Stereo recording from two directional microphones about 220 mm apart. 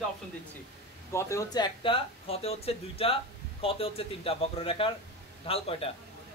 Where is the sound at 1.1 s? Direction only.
15° left (ahead or behind).